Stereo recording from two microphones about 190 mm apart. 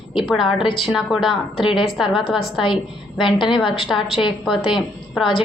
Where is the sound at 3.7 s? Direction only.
Centre (ahead or behind).